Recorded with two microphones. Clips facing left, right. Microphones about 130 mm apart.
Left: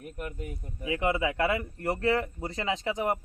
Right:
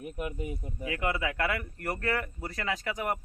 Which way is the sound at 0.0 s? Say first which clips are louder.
Right 3 dB; 15° right (ahead or behind).